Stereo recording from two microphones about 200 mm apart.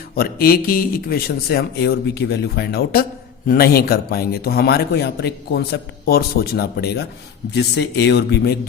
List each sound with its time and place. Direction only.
0.2 s a man's voice: 50° left (ahead or behind)